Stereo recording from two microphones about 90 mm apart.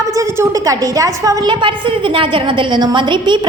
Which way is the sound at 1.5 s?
65° right (ahead or behind).